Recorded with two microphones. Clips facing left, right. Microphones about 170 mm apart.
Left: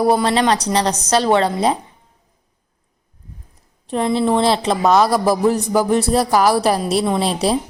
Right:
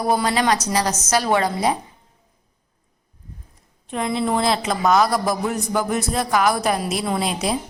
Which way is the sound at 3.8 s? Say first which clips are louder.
Left 5 dB; 35° left (ahead or behind).